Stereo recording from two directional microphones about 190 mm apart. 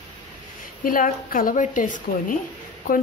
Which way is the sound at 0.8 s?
45° left (ahead or behind).